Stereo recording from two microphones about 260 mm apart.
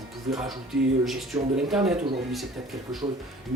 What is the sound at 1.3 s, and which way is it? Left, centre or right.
Speech, centre.